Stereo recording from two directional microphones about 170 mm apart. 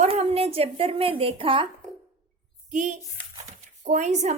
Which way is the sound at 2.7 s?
45° right (ahead or behind).